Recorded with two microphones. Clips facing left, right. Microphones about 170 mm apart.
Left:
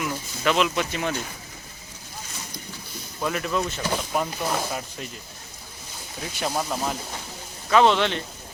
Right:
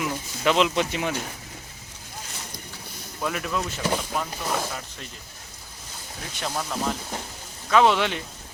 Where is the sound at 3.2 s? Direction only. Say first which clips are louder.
Left 2 dB; centre (ahead or behind).